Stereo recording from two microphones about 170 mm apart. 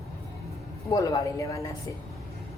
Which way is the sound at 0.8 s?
20° left (ahead or behind).